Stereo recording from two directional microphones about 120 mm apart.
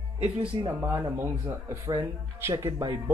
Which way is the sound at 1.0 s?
25° right (ahead or behind).